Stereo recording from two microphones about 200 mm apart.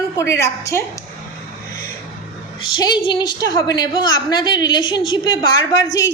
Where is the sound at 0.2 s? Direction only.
15° left (ahead or behind).